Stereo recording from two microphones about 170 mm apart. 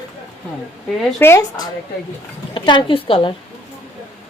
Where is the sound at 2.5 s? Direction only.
30° left (ahead or behind).